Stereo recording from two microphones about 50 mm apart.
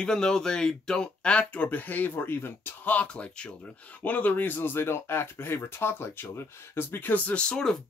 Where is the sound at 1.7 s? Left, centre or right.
Left.